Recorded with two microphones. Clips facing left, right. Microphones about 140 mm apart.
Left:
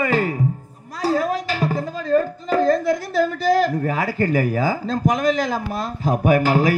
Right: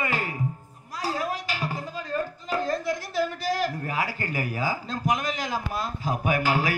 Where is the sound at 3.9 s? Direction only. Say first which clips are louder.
Left 9 dB; 45° left (ahead or behind).